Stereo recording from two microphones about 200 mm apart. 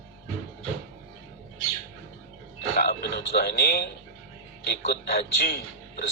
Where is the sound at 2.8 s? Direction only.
55° left (ahead or behind).